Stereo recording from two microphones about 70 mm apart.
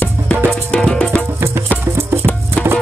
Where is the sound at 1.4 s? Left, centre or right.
Right.